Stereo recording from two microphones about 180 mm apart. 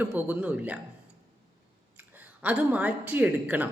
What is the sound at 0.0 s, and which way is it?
Speech, 10° right (ahead or behind).